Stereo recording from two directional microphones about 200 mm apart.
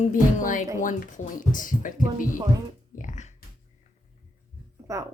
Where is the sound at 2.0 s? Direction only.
15° right (ahead or behind).